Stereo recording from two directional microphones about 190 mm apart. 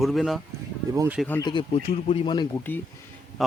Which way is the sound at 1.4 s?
25° left (ahead or behind).